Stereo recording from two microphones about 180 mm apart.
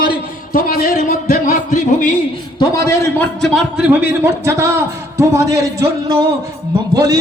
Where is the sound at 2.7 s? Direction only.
15° left (ahead or behind).